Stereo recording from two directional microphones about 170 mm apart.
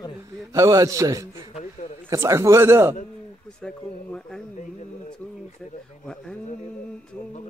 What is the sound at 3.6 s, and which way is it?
Speech, 5° left (ahead or behind).